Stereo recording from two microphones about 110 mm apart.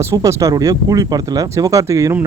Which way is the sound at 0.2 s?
30° right (ahead or behind).